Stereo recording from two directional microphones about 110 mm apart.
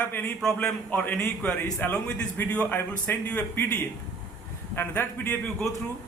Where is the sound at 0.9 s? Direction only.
15° left (ahead or behind).